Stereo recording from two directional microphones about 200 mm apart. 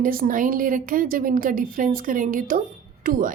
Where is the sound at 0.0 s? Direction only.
45° right (ahead or behind).